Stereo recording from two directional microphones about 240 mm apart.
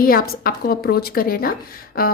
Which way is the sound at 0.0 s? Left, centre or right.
Left.